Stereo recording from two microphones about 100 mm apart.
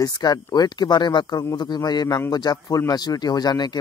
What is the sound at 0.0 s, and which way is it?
Speech, 40° left (ahead or behind).